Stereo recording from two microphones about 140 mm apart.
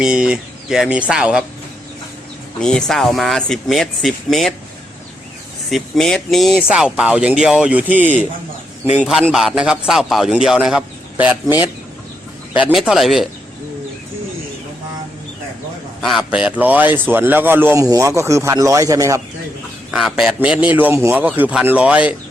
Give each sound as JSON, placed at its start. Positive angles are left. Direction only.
{"t": 0.0, "sound": "a man's voice", "side_deg": -5}
{"t": 2.6, "sound": "speech", "side_deg": 5}
{"t": 5.7, "sound": "a man's voice", "side_deg": 5}
{"t": 16.0, "sound": "a man's voice", "side_deg": 0}
{"t": 19.9, "sound": "a man's voice", "side_deg": 0}